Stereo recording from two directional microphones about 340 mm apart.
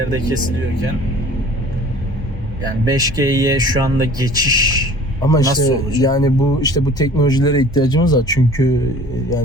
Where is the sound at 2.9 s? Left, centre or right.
Centre.